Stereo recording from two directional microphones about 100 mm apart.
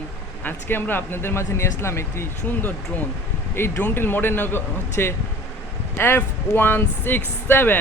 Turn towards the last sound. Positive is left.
turn(degrees=20)  # may be behind; listen again after turning